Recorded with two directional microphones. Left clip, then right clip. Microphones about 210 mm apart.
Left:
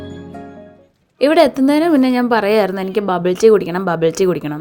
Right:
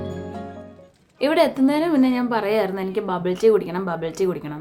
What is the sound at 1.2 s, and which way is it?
A woman's voice, 30° left (ahead or behind).